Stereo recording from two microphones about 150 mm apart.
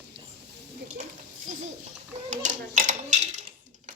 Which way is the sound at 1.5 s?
55° right (ahead or behind).